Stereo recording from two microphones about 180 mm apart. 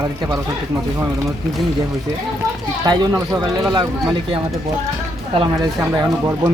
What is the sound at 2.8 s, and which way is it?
Speech, 20° right (ahead or behind).